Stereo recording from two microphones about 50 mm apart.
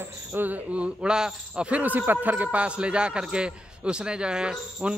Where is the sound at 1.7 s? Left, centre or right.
Right; by 4.9 s centre.